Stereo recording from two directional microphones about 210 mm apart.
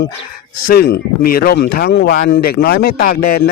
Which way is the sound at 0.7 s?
50° left (ahead or behind).